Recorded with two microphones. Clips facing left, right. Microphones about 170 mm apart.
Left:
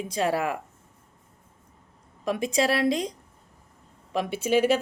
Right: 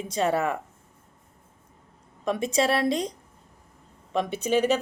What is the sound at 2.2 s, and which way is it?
Speech, centre (ahead or behind).